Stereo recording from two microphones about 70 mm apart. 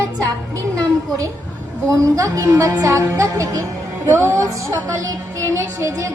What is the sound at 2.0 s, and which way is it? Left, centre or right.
A woman's voice, right.